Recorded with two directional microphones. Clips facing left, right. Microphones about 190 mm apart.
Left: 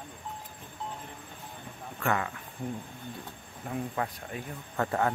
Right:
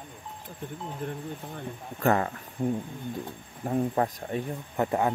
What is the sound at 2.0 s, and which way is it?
Speech, 35° right (ahead or behind).